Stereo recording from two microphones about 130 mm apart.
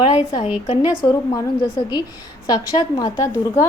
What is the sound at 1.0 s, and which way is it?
Speech, 20° left (ahead or behind).